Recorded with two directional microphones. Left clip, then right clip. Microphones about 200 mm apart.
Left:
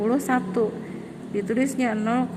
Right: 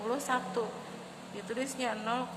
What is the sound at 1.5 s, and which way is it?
Speech, 30° left (ahead or behind).